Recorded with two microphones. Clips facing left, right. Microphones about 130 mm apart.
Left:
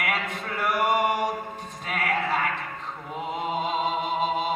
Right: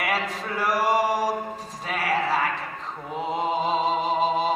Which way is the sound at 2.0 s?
35° right (ahead or behind).